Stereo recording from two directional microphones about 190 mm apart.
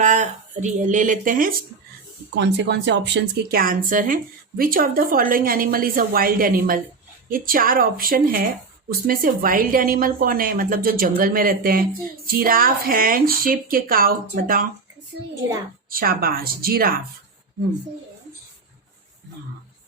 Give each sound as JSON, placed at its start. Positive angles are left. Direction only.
{"t": 0.0, "sound": "a woman's voice", "side_deg": -40}
{"t": 2.3, "sound": "a woman's voice", "side_deg": -65}
{"t": 15.9, "sound": "a woman's voice", "side_deg": -50}